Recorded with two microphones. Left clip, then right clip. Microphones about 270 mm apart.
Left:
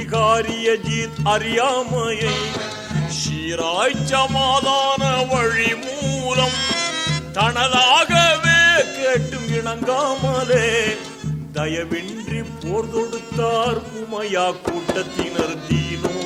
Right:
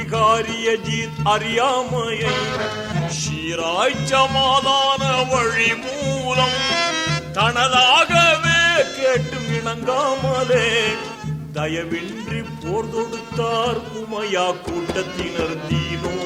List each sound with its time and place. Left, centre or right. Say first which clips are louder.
0.1 s music: even; centre
2.5 s music: right 3 dB; left
3.2 s music: left 4 dB; centre
6.5 s music: right 2 dB; left
7.3 s speech: right 1 dB; centre
9.6 s music: right 1 dB; centre
13.3 s music: left 1 dB; centre